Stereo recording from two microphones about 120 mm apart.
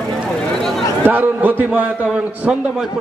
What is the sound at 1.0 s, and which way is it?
A man's voice, 15° right (ahead or behind).